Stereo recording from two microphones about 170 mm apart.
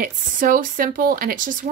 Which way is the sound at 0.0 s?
50° right (ahead or behind).